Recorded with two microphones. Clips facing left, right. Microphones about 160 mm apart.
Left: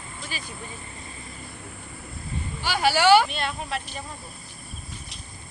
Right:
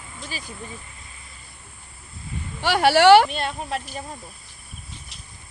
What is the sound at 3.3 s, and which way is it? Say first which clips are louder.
Speech: right 2 dB; 40° right (ahead or behind).